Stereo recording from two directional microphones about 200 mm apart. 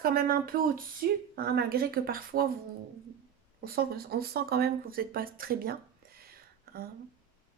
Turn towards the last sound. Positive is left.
turn(degrees=-50)  # may be behind; listen again after turning